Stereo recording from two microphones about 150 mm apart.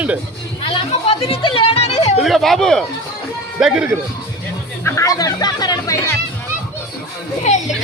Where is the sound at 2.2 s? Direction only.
Centre (ahead or behind).